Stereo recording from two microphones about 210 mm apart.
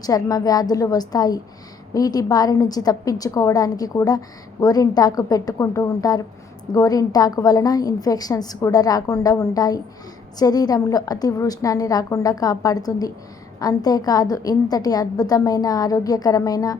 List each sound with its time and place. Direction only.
0.0 s a woman's voice: 15° left (ahead or behind)